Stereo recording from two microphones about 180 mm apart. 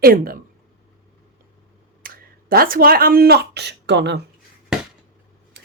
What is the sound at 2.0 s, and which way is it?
Speech, 55° right (ahead or behind).